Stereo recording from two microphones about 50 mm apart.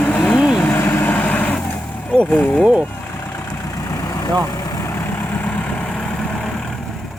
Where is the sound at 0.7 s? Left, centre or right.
Left.